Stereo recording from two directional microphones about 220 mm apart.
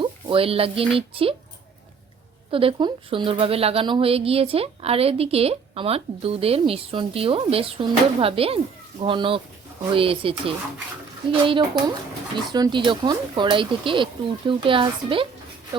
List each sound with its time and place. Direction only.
0.0 s speech: 25° right (ahead or behind)
2.5 s speech: 25° right (ahead or behind)